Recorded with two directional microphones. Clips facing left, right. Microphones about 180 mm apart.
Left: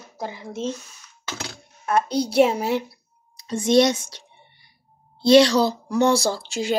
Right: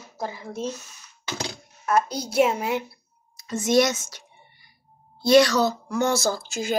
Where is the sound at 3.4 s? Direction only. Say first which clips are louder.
Left 3 dB; 30° left (ahead or behind).